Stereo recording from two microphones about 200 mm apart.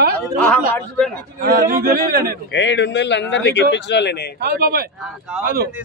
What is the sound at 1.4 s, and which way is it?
Speech, 45° right (ahead or behind).